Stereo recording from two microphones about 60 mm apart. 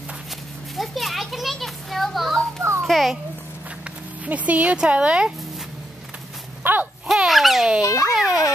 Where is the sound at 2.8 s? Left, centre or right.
Centre.